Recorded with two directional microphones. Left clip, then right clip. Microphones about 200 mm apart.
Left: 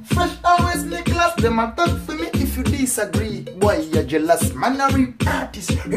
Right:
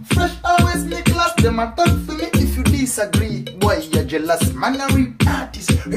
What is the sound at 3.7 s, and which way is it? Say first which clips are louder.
Music: even; 10° left (ahead or behind).